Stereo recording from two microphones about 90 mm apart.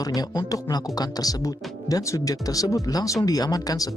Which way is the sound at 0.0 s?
45° left (ahead or behind).